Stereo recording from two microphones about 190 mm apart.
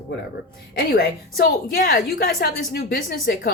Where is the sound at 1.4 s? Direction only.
50° left (ahead or behind).